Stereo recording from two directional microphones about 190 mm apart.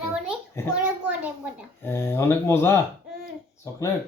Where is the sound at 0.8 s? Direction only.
5° right (ahead or behind).